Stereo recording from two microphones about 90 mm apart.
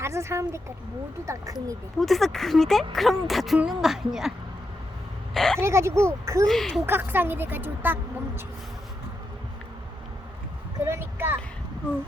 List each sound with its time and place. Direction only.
0.0 s a woman's voice: 30° right (ahead or behind)
2.0 s speech: centre (ahead or behind)
5.3 s vehicle: 5° left (ahead or behind)
5.5 s speech: 30° right (ahead or behind)
6.4 s speech: 5° left (ahead or behind)
6.8 s a woman's voice: 25° right (ahead or behind)
10.8 s a sound: 30° right (ahead or behind)